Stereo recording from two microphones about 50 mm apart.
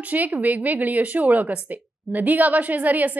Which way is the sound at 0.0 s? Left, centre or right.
Right.